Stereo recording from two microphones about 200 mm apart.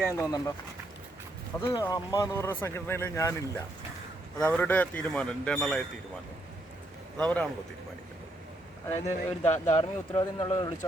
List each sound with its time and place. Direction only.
0.0 s speech: 15° left (ahead or behind)
1.5 s speech: 15° left (ahead or behind)
7.2 s speech: 5° left (ahead or behind)
8.9 s speech: 10° left (ahead or behind)
9.5 s speech: 35° left (ahead or behind)
10.1 s speech: 25° left (ahead or behind)